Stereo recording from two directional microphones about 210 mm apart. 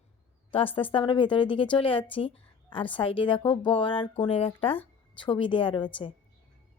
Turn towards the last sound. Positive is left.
turn(degrees=25)  # may be behind; listen again after turning